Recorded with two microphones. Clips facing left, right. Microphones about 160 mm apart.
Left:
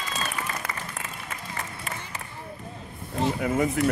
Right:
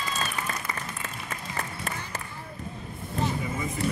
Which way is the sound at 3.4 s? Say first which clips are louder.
Left 8 dB; 65° left (ahead or behind).